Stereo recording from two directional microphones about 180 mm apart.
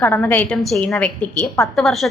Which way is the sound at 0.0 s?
10° left (ahead or behind).